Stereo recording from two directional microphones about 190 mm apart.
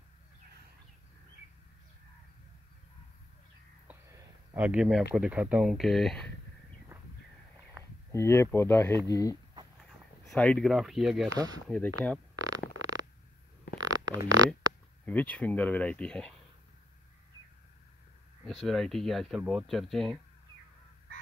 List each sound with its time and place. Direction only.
4.6 s speech: 5° right (ahead or behind)
6.9 s a sound: 15° right (ahead or behind)
8.1 s speech: 15° left (ahead or behind)
10.2 s speech: 5° left (ahead or behind)
11.2 s speech: 20° right (ahead or behind)
11.7 s speech: 5° left (ahead or behind)
12.4 s fart: 20° right (ahead or behind)
13.7 s a sound: 20° right (ahead or behind)
15.0 s speech: 5° left (ahead or behind)
18.4 s speech: centre (ahead or behind)